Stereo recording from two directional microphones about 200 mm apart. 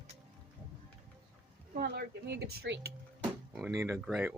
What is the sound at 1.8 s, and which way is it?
Speech, 55° right (ahead or behind).